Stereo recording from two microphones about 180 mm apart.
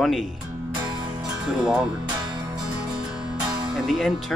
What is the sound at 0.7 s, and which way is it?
Music, 20° right (ahead or behind).